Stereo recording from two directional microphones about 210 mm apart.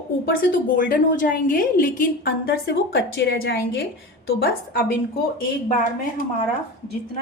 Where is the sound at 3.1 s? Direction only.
50° left (ahead or behind).